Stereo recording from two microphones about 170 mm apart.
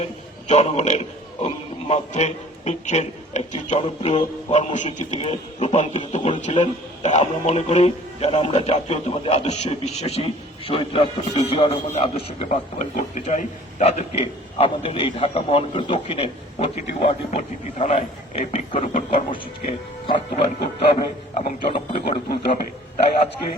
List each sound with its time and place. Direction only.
0.0 s a man's voice: 40° left (ahead or behind)